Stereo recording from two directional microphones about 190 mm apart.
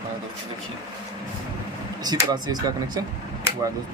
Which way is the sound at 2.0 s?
20° right (ahead or behind).